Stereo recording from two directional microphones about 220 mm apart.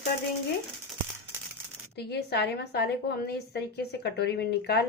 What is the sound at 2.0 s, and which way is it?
A woman's voice, 50° left (ahead or behind).